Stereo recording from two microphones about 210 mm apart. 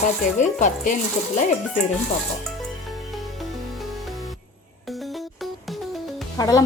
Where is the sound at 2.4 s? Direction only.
Centre (ahead or behind).